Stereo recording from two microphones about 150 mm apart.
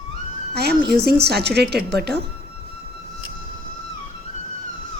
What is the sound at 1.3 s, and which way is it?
Speech, 90° right.